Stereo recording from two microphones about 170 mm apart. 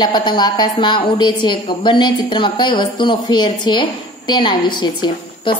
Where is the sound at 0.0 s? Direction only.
25° left (ahead or behind).